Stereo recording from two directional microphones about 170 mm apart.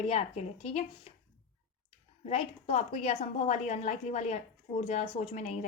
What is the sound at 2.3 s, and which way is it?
A woman's voice, 40° left (ahead or behind).